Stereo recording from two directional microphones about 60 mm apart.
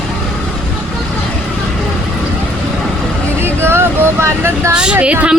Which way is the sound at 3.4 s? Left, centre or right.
Right.